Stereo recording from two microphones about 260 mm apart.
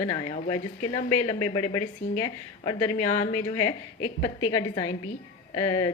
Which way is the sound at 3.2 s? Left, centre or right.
Left.